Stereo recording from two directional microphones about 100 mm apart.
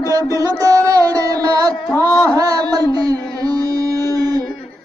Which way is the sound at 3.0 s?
40° right (ahead or behind).